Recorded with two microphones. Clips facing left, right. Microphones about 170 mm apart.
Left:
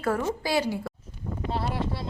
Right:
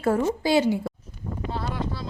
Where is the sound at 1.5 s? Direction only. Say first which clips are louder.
Left 1 dB; 30° left (ahead or behind).